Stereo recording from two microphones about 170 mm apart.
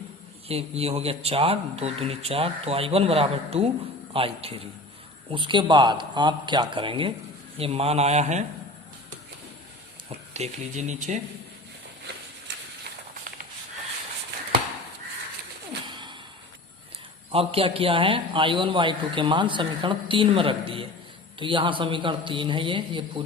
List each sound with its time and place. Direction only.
0.4 s a man's voice: 35° right (ahead or behind)
10.3 s speech: 40° right (ahead or behind)
15.9 s a sound: 25° right (ahead or behind)
17.3 s a man's voice: 35° right (ahead or behind)